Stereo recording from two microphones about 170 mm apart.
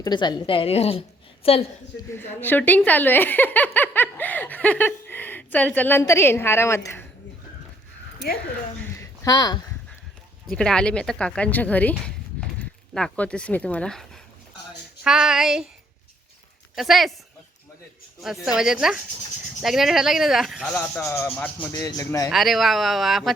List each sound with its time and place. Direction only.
0.0 s a woman's voice: 25° left (ahead or behind)
2.0 s speech: 10° left (ahead or behind)
9.2 s speech: 25° left (ahead or behind)
10.5 s speech: 5° left (ahead or behind)
16.7 s speech: centre (ahead or behind)
18.4 s speech: 5° right (ahead or behind)
20.7 s speech: 15° left (ahead or behind)
21.7 s speech: 20° left (ahead or behind)
22.3 s speech: centre (ahead or behind)